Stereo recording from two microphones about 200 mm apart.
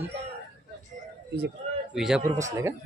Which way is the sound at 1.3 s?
55° right (ahead or behind).